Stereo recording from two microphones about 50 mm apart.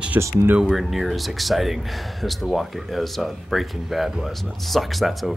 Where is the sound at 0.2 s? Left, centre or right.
Right.